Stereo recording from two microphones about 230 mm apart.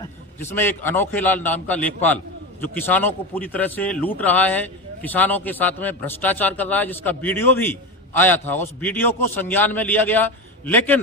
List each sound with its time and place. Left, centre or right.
0.0 s a man's voice: centre